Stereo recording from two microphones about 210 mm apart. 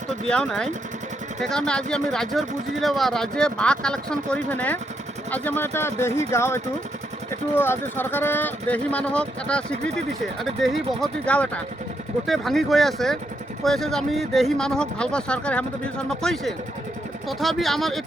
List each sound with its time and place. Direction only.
0.3 s speech: 5° left (ahead or behind)